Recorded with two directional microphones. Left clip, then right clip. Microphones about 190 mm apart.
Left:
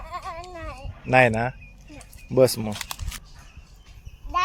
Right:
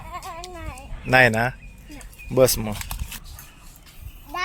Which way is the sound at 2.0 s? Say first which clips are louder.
Right 1 dB; 5° left (ahead or behind).